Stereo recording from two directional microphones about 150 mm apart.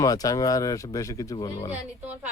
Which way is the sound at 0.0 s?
25° left (ahead or behind).